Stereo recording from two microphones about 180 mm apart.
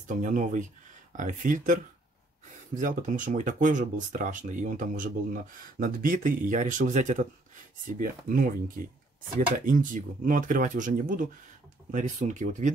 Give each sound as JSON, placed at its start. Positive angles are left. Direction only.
{"t": 0.2, "sound": "speech", "side_deg": -45}